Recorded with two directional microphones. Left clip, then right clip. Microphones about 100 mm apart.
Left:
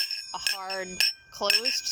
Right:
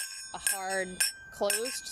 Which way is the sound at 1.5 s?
15° left (ahead or behind).